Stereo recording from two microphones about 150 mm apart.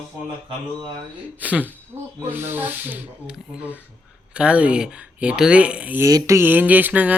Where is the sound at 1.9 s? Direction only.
35° right (ahead or behind).